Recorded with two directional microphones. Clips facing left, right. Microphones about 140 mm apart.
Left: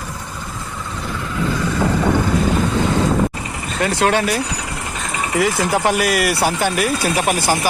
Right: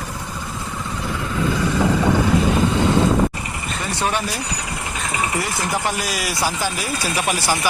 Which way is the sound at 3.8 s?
85° left.